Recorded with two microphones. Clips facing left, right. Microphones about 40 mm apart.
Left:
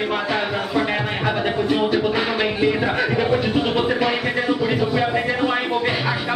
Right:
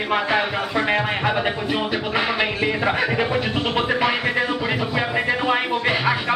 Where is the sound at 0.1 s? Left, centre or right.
Centre.